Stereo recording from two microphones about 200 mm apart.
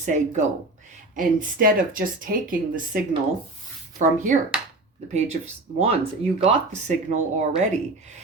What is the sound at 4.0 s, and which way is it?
Speech, 40° right (ahead or behind).